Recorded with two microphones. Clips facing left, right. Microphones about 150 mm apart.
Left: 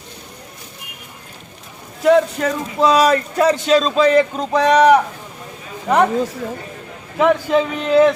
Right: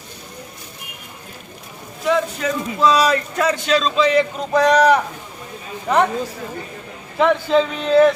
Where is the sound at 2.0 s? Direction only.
50° left (ahead or behind).